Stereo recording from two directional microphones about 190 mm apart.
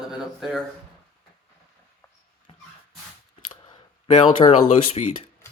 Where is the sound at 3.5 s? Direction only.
25° left (ahead or behind).